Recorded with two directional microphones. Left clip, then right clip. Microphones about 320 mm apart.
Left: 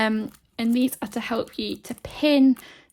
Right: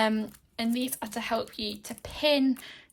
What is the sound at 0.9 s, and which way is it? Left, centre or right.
A woman's voice, centre.